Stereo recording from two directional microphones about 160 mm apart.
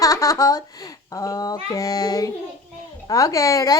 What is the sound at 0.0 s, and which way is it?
A child's voice, 20° left (ahead or behind).